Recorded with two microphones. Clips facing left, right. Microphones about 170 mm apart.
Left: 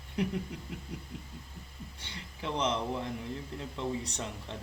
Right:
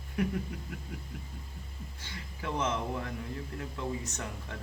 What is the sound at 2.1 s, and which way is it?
Speech, 20° left (ahead or behind).